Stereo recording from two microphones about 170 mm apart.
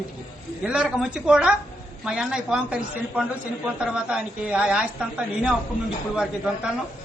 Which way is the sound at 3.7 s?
5° right (ahead or behind).